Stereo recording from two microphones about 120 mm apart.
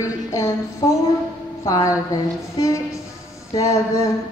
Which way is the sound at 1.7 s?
30° left (ahead or behind).